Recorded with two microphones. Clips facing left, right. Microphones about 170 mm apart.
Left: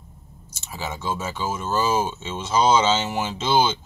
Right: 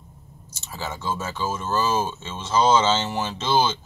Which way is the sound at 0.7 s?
15° left (ahead or behind).